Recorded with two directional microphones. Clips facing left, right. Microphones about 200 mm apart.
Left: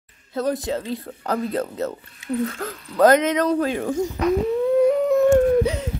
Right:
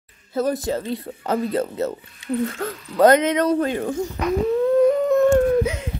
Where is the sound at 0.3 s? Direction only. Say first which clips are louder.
Right 1 dB; 5° right (ahead or behind).